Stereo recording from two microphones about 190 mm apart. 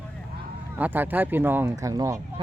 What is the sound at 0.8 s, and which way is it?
Speech, 10° right (ahead or behind).